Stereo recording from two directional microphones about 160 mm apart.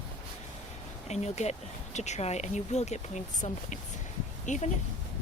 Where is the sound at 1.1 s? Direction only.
45° left (ahead or behind).